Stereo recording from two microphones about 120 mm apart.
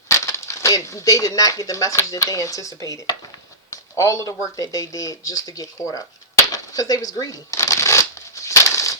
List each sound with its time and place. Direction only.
0.1 s speech: 25° left (ahead or behind)
6.5 s shuffling cards: 30° left (ahead or behind)
8.4 s crushing: 25° left (ahead or behind)